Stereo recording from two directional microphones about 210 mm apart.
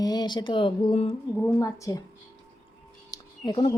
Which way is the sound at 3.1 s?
20° left (ahead or behind).